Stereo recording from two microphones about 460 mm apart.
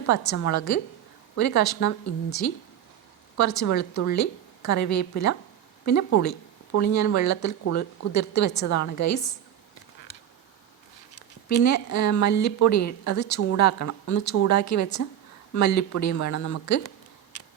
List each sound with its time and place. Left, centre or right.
0.0 s speech: left
3.3 s speech: left
10.1 s a sound: centre
11.6 s speech: left